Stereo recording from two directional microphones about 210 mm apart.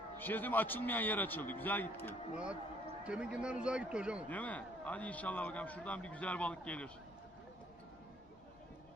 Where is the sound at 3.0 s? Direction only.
5° right (ahead or behind).